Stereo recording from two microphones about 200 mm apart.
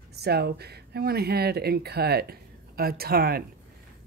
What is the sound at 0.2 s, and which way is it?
Speech, 55° right (ahead or behind).